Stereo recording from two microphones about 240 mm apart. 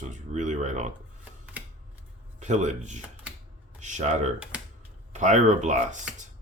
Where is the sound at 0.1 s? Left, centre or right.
Right.